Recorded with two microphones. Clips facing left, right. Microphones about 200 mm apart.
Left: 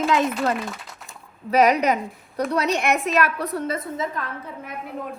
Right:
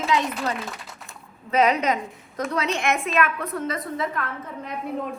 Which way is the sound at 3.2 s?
35° left (ahead or behind).